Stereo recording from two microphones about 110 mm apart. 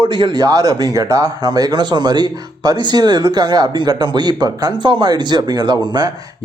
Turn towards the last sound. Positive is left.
turn(degrees=-40)  # may be behind; listen again after turning